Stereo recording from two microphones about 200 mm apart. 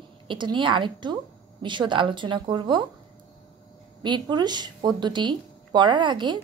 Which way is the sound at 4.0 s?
20° right (ahead or behind).